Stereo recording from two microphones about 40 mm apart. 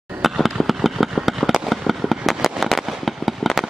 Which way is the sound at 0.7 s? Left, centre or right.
Centre.